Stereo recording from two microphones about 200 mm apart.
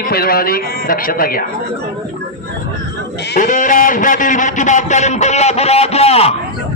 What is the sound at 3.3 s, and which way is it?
A man's voice, 40° left (ahead or behind).